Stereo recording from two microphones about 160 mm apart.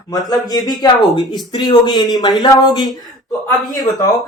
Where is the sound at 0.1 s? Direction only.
25° left (ahead or behind).